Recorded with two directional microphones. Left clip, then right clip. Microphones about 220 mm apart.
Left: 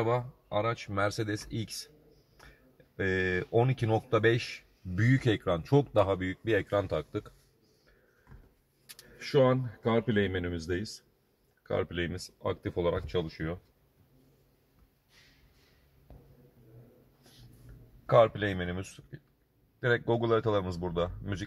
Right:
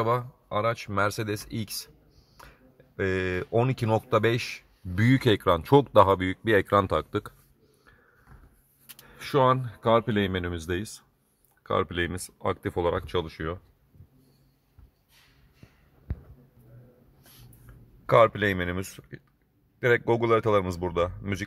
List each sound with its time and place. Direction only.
0.0 s speech: 35° right (ahead or behind)
3.0 s speech: 35° right (ahead or behind)
9.8 s speech: 50° right (ahead or behind)
18.0 s speech: 40° right (ahead or behind)